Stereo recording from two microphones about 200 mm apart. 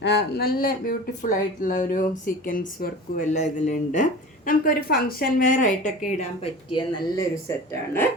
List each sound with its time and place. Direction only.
0.0 s speech: 55° left (ahead or behind); by 7.5 s 20° left (ahead or behind)